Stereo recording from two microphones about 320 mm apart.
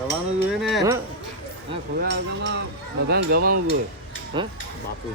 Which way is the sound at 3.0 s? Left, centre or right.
Right.